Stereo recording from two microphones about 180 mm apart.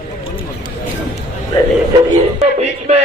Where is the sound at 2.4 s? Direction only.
35° right (ahead or behind).